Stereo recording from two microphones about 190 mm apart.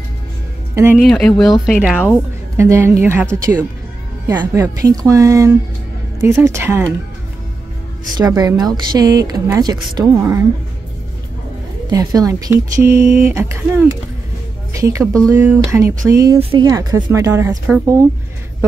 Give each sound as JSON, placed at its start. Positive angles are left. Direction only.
{"t": 0.9, "sound": "speech", "side_deg": 0}
{"t": 8.1, "sound": "a woman's voice", "side_deg": -20}
{"t": 11.9, "sound": "a woman's voice", "side_deg": -20}
{"t": 16.3, "sound": "a woman's voice", "side_deg": -30}
{"t": 16.6, "sound": "speech", "side_deg": -15}